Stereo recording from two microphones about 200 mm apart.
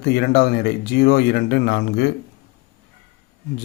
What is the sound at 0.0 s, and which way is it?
Speech, 55° left (ahead or behind).